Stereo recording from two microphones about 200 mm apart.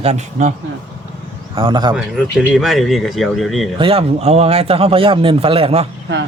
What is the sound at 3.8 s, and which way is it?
Speech, 30° right (ahead or behind).